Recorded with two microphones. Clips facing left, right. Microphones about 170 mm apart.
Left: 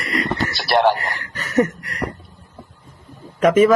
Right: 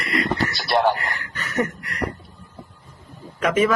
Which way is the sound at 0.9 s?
40° left (ahead or behind).